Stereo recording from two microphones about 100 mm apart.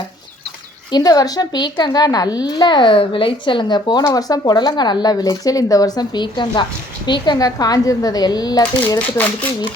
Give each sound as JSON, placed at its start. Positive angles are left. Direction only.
{"t": 0.9, "sound": "speech", "side_deg": 45}
{"t": 9.0, "sound": "speech", "side_deg": 15}